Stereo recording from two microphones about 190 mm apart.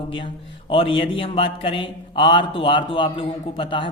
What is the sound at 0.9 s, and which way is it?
A man's voice, 30° left (ahead or behind).